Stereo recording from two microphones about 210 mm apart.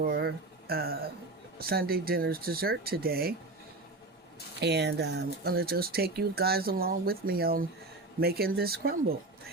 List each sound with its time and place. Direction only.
0.0 s speech: 50° right (ahead or behind)
4.6 s speech: 55° right (ahead or behind)